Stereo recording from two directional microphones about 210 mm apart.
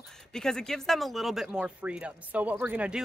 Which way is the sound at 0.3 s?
5° left (ahead or behind).